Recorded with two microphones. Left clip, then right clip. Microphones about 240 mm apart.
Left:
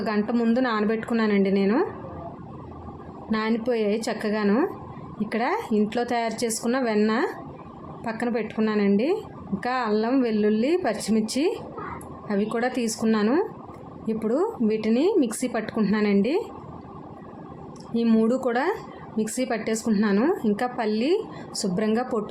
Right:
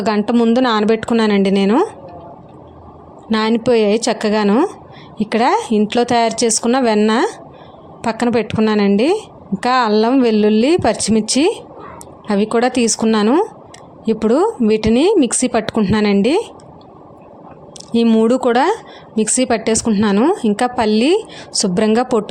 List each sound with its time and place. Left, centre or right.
0.0 s a woman's voice: right
3.2 s a woman's voice: right
17.9 s a woman's voice: right